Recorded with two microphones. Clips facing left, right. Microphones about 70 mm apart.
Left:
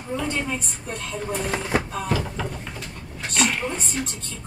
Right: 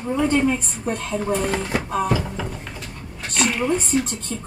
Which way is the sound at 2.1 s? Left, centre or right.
Centre.